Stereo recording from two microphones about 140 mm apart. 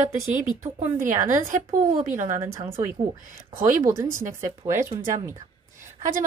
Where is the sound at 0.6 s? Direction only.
65° right (ahead or behind).